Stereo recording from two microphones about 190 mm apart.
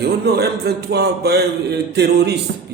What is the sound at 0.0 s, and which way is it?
A man's voice, 60° right (ahead or behind).